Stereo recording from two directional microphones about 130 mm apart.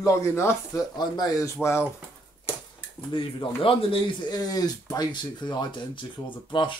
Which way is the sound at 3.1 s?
40° left (ahead or behind).